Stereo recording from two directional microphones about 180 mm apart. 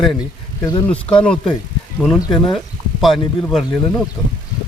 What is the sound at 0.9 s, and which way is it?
Speech, 5° left (ahead or behind).